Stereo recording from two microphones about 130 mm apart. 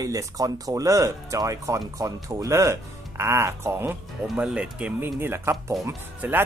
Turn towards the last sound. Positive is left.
turn(degrees=-15)  # may be behind; listen again after turning